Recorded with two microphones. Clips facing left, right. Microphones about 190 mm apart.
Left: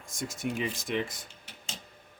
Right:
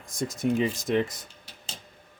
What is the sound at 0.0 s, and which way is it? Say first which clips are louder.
Speech: right 6 dB; 35° right (ahead or behind).